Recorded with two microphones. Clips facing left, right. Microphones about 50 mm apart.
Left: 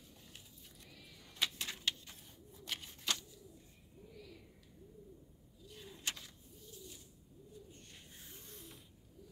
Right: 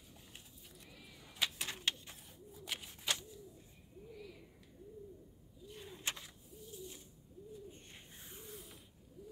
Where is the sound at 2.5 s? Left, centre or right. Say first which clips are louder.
Even; centre.